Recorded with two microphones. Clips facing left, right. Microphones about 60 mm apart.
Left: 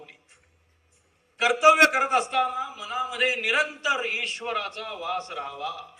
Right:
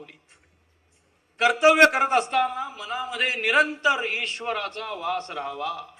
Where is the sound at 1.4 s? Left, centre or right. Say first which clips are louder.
Right 1 dB; right.